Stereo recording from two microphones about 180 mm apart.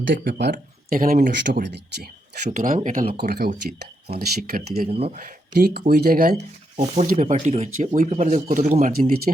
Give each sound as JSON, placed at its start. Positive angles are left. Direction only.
{"t": 0.1, "sound": "speech", "side_deg": -70}
{"t": 0.5, "sound": "speech", "side_deg": -50}
{"t": 4.9, "sound": "speech", "side_deg": -35}
{"t": 5.1, "sound": "speech", "side_deg": -55}
{"t": 6.7, "sound": "speech", "side_deg": -40}